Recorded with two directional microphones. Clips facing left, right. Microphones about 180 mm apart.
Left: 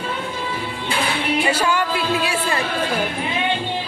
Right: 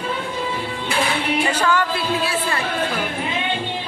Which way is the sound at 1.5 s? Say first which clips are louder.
Even; 10° left (ahead or behind).